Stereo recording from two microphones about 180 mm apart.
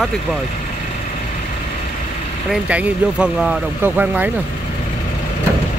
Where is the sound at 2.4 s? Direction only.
5° right (ahead or behind).